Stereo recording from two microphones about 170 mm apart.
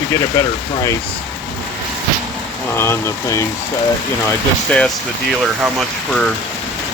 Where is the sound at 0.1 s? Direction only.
20° left (ahead or behind).